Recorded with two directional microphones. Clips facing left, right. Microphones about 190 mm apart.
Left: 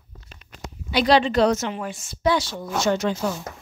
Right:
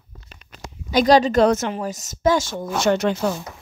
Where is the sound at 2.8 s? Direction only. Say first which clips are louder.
Right 3 dB; 65° right (ahead or behind).